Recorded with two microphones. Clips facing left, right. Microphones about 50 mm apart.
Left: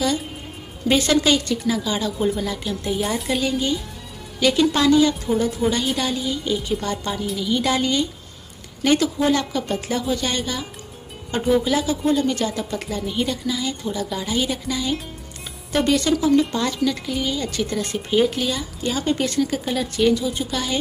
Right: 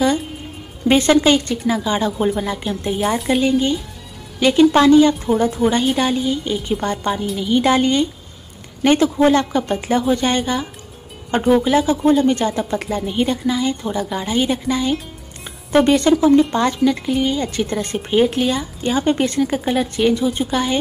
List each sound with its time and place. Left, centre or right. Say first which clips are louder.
0.8 s a woman's voice: right 5 dB; right
3.0 s a woman's voice: right 7 dB; centre; by 20.8 s right